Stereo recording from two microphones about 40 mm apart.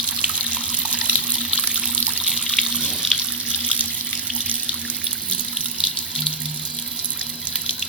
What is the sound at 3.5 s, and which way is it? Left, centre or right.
Water tap, right.